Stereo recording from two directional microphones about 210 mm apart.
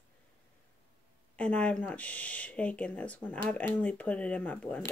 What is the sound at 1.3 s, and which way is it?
Speech, 5° left (ahead or behind).